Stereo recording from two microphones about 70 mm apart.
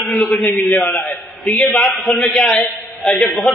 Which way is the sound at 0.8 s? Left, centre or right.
Left.